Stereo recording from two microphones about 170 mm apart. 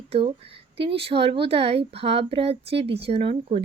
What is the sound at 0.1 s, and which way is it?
Speech, 35° right (ahead or behind).